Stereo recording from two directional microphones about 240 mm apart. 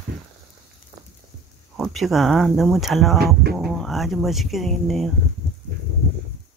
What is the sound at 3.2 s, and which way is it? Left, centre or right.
Speech, right.